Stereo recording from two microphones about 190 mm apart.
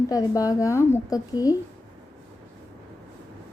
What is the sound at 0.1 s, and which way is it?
A woman's voice, 20° left (ahead or behind).